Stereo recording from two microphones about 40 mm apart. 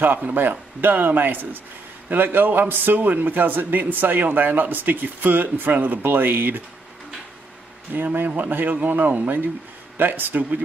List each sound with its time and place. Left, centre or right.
0.3 s speech: right
7.9 s speech: right